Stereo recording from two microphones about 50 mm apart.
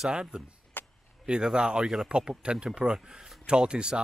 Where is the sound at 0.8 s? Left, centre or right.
Left.